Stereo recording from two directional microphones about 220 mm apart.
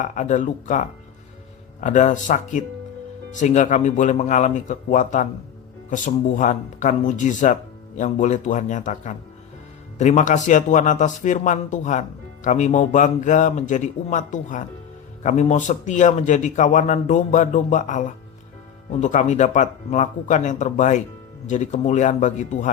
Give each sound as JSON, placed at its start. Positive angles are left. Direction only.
{"t": 0.0, "sound": "speech", "side_deg": 35}